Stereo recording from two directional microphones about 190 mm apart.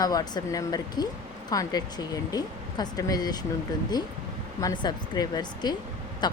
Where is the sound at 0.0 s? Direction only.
20° left (ahead or behind).